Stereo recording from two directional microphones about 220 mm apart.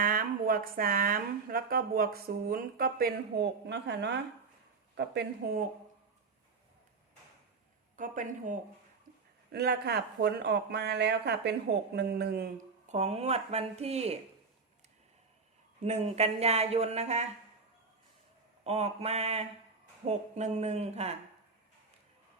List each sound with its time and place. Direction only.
0.0 s speech: 40° right (ahead or behind)
7.9 s speech: 35° right (ahead or behind)
9.5 s speech: 45° right (ahead or behind)
12.9 s speech: 30° right (ahead or behind)
15.8 s speech: 30° right (ahead or behind)
18.6 s speech: 30° right (ahead or behind)